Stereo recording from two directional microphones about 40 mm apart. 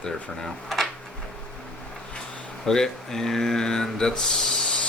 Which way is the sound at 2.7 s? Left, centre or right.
Centre.